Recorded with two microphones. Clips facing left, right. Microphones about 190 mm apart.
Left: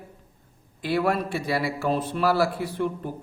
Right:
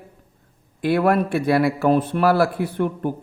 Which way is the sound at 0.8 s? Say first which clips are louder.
Right 6 dB; 55° right (ahead or behind).